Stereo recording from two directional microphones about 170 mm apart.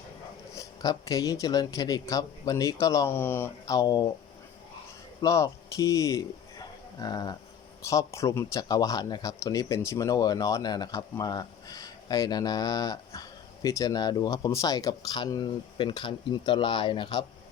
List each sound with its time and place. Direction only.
0.5 s speech: 20° left (ahead or behind)
5.2 s speech: 20° left (ahead or behind)